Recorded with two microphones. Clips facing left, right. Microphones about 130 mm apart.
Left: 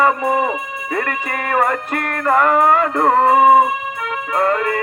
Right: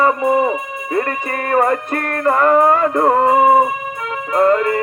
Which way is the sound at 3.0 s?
20° right (ahead or behind).